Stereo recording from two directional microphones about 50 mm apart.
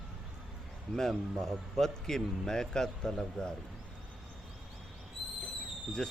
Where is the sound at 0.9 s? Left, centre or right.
Centre.